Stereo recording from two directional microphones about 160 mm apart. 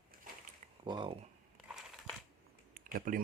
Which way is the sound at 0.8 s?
30° right (ahead or behind).